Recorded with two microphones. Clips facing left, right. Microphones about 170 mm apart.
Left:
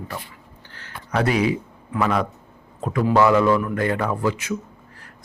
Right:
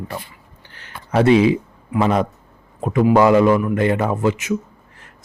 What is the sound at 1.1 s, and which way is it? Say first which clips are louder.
Speech: right 7 dB; 30° right (ahead or behind).